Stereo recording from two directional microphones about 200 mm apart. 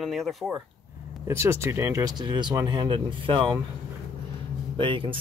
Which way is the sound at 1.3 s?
10° right (ahead or behind).